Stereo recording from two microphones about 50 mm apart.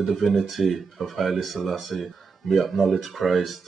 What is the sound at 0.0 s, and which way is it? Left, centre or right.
Speech, centre.